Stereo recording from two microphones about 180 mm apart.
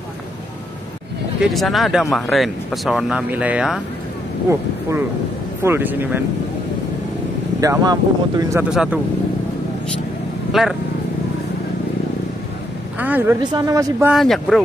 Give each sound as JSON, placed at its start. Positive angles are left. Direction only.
{"t": 1.4, "sound": "speech", "side_deg": 0}
{"t": 5.6, "sound": "speech", "side_deg": -10}
{"t": 7.6, "sound": "speech", "side_deg": -20}
{"t": 8.6, "sound": "speech", "side_deg": -5}
{"t": 10.5, "sound": "speech", "side_deg": 0}
{"t": 13.0, "sound": "speech", "side_deg": -10}
{"t": 13.4, "sound": "speech", "side_deg": -25}
{"t": 14.0, "sound": "speech", "side_deg": 0}